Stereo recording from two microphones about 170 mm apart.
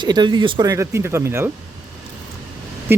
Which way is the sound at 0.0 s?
25° right (ahead or behind).